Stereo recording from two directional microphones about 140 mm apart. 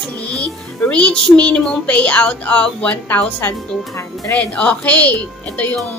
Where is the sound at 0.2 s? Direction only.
10° left (ahead or behind).